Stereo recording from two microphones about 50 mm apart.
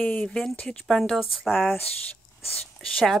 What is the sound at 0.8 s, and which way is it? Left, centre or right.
Speech, centre.